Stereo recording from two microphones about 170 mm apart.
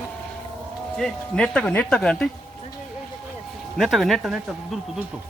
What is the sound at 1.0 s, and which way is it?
Speech, 5° left (ahead or behind).